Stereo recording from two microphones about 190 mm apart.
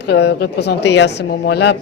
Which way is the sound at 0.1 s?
60° left (ahead or behind).